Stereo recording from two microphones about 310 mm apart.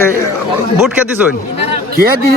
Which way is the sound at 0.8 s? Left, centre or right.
Centre.